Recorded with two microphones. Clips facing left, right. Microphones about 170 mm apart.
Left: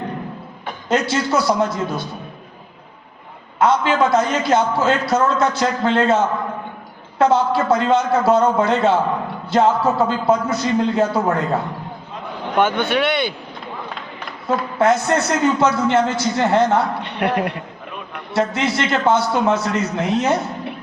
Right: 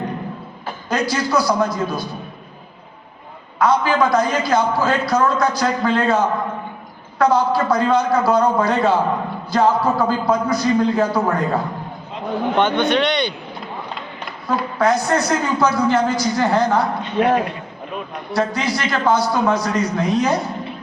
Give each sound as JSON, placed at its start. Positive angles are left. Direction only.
{"t": 0.9, "sound": "a man's voice", "side_deg": 25}
{"t": 3.6, "sound": "a man's voice", "side_deg": 25}
{"t": 12.5, "sound": "speech", "side_deg": 10}
{"t": 14.4, "sound": "a man's voice", "side_deg": 25}
{"t": 17.0, "sound": "a woman's voice", "side_deg": 65}
{"t": 18.3, "sound": "a man's voice", "side_deg": 25}